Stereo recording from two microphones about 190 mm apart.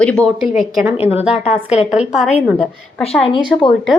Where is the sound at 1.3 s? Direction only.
35° left (ahead or behind).